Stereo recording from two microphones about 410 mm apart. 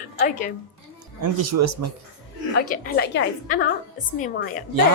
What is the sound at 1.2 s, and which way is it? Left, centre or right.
Speech, right.